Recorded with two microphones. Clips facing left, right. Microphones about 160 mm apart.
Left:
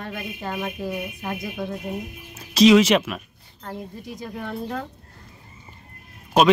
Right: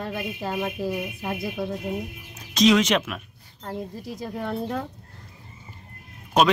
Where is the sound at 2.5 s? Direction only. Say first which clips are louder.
Left 4 dB; 5° left (ahead or behind).